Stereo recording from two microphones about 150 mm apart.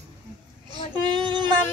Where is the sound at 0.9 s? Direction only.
30° right (ahead or behind).